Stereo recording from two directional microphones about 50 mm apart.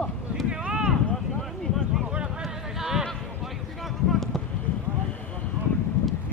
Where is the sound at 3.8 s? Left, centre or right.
Centre.